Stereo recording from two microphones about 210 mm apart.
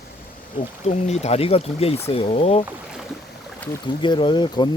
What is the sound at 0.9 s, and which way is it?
Speech, 30° left (ahead or behind).